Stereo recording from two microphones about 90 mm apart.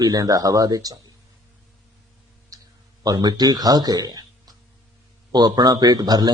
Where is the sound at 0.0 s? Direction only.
45° right (ahead or behind).